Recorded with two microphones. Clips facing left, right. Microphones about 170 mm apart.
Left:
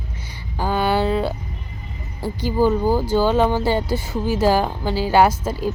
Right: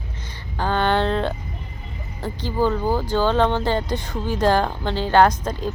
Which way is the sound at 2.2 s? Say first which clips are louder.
Left 3 dB; 10° left (ahead or behind).